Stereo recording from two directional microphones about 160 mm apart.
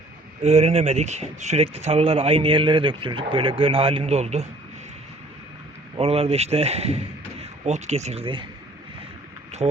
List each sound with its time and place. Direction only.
0.4 s speech: 40° right (ahead or behind)
6.0 s speech: 40° right (ahead or behind)
9.6 s speech: 30° right (ahead or behind)